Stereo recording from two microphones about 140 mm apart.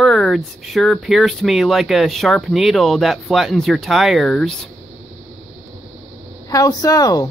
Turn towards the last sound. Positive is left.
turn(degrees=25)  # may be behind; listen again after turning